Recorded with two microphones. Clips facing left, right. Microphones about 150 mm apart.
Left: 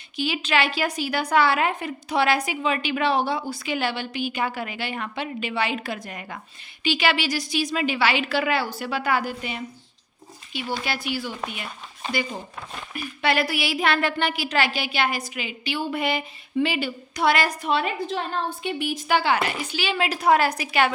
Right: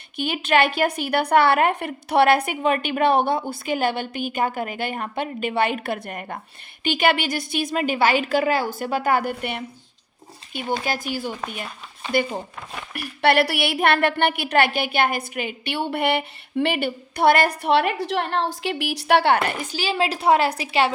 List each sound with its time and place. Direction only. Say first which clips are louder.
0.2 s a woman's voice: right 4 dB; 55° right (ahead or behind)
10.5 s a woman's voice: right 3 dB; 50° right (ahead or behind)
12.9 s a woman's voice: right 5 dB; 65° right (ahead or behind); by 20.9 s 30° right (ahead or behind)